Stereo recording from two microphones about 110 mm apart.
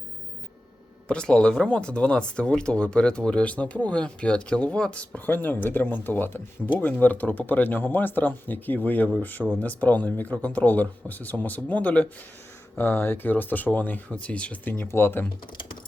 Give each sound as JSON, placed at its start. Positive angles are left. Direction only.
{"t": 1.0, "sound": "speech", "side_deg": 10}